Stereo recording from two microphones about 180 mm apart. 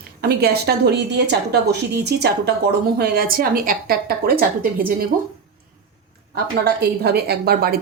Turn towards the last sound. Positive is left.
turn(degrees=-60)  # may be behind; listen again after turning